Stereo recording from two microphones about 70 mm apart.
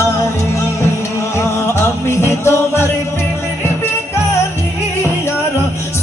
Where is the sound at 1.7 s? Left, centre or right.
Left.